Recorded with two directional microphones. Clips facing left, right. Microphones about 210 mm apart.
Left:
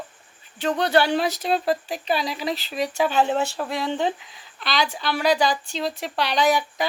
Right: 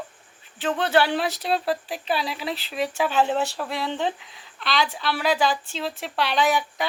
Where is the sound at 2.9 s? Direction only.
Centre (ahead or behind).